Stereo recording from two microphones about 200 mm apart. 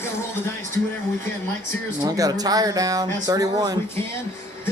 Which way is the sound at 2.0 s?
20° right (ahead or behind).